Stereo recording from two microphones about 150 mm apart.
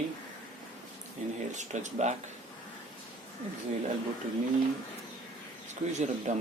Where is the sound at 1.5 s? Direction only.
55° right (ahead or behind).